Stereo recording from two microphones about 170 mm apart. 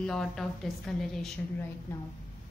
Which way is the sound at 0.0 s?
5° left (ahead or behind).